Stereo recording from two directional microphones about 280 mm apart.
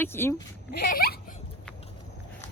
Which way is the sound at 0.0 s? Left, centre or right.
Centre.